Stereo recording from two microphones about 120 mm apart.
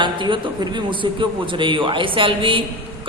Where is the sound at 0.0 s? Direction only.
40° right (ahead or behind).